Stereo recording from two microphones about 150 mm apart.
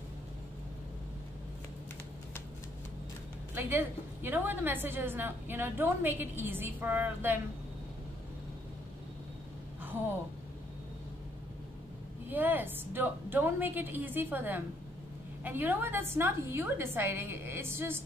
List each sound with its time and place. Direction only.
3.5 s a woman's voice: 15° right (ahead or behind)
12.3 s a woman's voice: 15° right (ahead or behind)